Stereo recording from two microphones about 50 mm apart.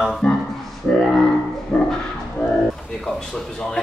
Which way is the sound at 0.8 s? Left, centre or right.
Left.